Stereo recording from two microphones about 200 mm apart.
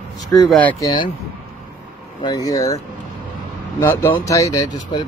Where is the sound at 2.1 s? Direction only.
20° left (ahead or behind).